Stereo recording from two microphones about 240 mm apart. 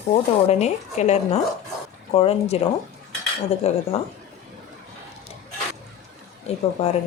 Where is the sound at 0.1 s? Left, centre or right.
Left.